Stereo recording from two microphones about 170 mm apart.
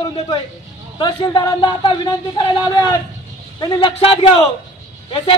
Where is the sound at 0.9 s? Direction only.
25° left (ahead or behind).